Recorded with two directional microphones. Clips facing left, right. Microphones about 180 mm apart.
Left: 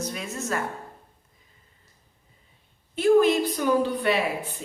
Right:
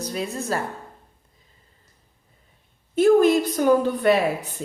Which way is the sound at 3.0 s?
45° right (ahead or behind).